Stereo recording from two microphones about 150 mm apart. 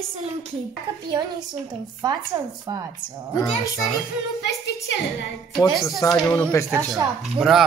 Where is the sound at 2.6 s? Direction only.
30° right (ahead or behind).